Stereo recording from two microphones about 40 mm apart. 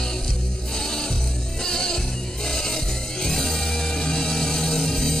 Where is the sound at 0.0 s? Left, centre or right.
Centre.